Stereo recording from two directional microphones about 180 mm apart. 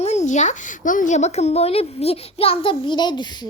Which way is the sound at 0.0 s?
40° left (ahead or behind).